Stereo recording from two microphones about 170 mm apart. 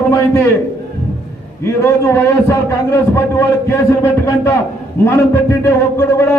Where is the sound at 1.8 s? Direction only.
15° left (ahead or behind).